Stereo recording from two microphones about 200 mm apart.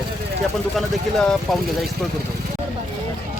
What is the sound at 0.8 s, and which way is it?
Speech, centre (ahead or behind).